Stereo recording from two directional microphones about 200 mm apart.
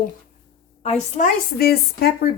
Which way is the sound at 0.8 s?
35° left (ahead or behind).